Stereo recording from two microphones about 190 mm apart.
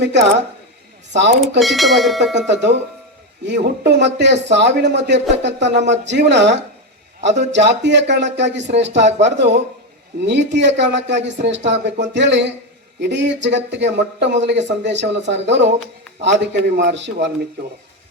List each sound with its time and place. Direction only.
0.0 s a woman's voice: 65° right (ahead or behind)
1.5 s speech: centre (ahead or behind)
2.5 s speech: 65° right (ahead or behind)
10.2 s speech: 70° right (ahead or behind)